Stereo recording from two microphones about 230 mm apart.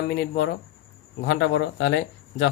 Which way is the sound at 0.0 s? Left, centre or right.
Left.